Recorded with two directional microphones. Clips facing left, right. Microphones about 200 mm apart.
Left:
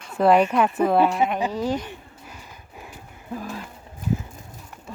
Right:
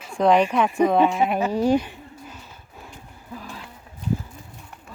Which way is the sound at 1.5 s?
10° right (ahead or behind).